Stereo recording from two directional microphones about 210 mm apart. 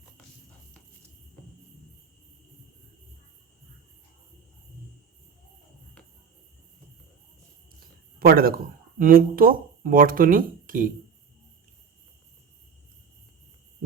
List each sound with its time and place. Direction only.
8.2 s speech: 45° right (ahead or behind)